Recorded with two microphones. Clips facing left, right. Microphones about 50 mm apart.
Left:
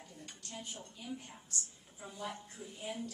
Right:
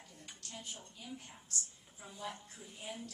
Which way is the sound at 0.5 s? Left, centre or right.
Centre.